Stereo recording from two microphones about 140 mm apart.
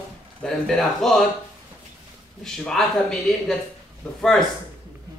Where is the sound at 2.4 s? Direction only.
5° left (ahead or behind).